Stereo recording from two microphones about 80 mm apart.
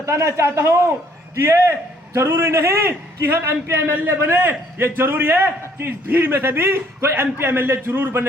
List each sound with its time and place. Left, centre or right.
0.0 s a man's voice: right
3.9 s a man's voice: right